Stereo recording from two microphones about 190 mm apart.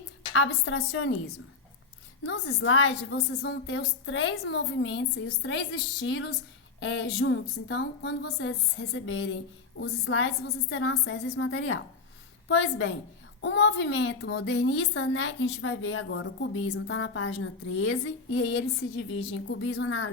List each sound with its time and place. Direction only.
0.3 s a woman's voice: 85° left
2.2 s a woman's voice: 80° left
9.8 s a woman's voice: 80° left
13.4 s a woman's voice: 75° left (ahead or behind)
19.3 s a woman's voice: 70° left (ahead or behind)